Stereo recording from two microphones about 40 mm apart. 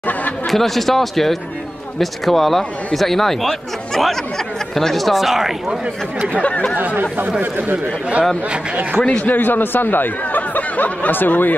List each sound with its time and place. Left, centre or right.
0.5 s speech: centre
6.4 s speech: left
6.8 s speech: right
9.0 s a man's voice: left
9.3 s speech: left